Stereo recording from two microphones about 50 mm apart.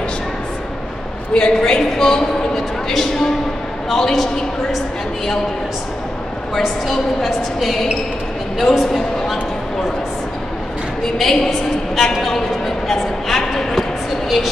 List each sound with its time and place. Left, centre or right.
1.3 s a man's voice: centre
6.5 s a woman's voice: centre
8.7 s a woman's voice: centre
11.1 s a woman's voice: centre